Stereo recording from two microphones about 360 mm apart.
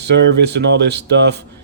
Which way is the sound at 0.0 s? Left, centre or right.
Right.